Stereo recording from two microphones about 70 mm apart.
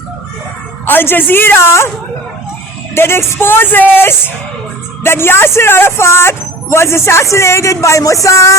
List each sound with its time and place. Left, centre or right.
0.9 s a man's voice: left
2.9 s a man's voice: left